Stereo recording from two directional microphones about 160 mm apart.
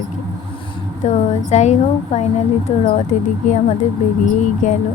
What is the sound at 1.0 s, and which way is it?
Speech, 45° left (ahead or behind).